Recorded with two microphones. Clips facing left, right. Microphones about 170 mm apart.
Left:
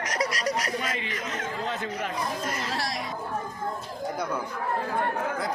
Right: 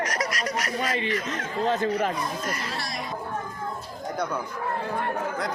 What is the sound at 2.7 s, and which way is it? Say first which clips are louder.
Speech: left 2 dB; 90° left.